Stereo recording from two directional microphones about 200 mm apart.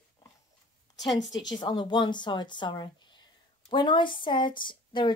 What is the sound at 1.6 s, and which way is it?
Speech, 20° left (ahead or behind).